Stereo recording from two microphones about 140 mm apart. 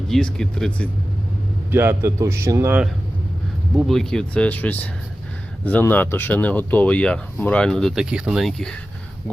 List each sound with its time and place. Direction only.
0.1 s speech: 5° left (ahead or behind)
1.7 s a man's voice: 15° right (ahead or behind)
3.8 s speech: centre (ahead or behind)